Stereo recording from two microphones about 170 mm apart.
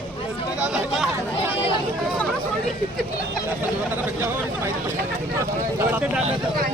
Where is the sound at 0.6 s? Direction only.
5° right (ahead or behind).